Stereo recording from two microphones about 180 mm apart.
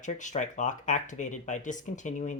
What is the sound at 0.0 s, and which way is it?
Speech, 45° left (ahead or behind).